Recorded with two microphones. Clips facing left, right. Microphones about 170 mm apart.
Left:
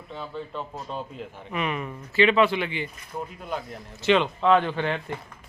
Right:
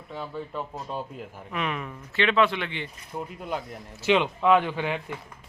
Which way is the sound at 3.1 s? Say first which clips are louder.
Even; 5° right (ahead or behind).